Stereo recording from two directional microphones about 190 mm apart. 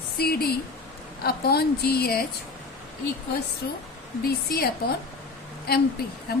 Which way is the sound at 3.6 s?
55° left (ahead or behind).